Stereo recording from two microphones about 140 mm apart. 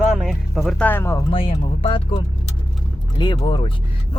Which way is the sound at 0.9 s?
15° left (ahead or behind).